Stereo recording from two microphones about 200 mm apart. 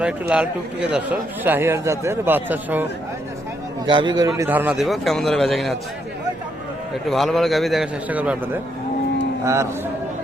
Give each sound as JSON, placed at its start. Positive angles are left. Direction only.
{"t": 0.0, "sound": "speech", "side_deg": -5}
{"t": 3.8, "sound": "a man's voice", "side_deg": -20}
{"t": 4.4, "sound": "a man's voice", "side_deg": -10}
{"t": 7.1, "sound": "a man's voice", "side_deg": 0}